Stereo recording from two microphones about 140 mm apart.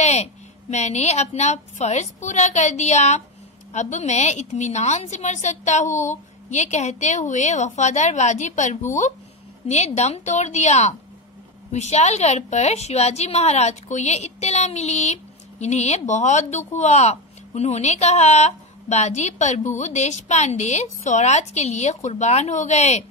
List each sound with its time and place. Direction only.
0.0 s a woman's voice: 50° left (ahead or behind)